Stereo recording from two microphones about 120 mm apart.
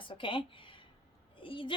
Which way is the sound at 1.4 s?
45° left (ahead or behind).